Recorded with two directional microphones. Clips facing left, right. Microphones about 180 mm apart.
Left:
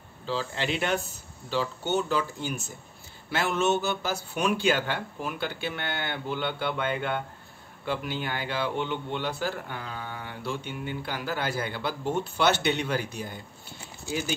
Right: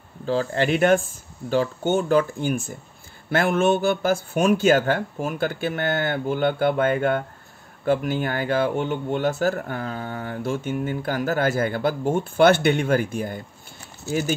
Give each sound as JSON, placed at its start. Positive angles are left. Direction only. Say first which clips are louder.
{"t": 0.3, "sound": "speech", "louder": "right 8 dB", "side_deg": -50}